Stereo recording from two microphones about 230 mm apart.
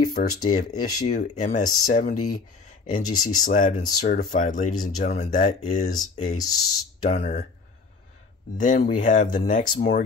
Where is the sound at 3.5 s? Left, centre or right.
Left.